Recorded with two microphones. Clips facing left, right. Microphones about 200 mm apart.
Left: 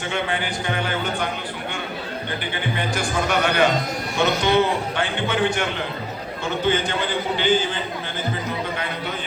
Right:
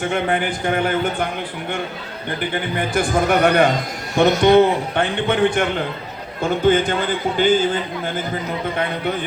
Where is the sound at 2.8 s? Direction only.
55° right (ahead or behind).